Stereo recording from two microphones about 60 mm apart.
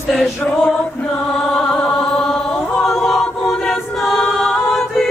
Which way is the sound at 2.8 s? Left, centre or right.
Centre.